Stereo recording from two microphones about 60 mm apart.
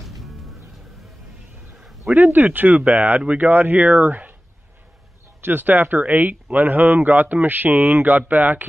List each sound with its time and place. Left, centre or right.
0.2 s music: centre
2.0 s speech: right
5.4 s speech: right